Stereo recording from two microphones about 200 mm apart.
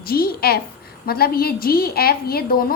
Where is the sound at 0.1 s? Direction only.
50° left (ahead or behind).